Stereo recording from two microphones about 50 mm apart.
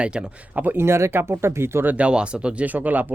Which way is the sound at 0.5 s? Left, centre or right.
Right.